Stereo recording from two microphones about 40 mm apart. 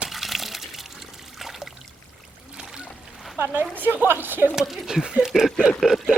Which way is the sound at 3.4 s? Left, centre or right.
Right.